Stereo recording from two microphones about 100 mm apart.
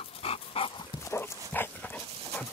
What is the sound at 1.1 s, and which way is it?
Dog, 20° left (ahead or behind).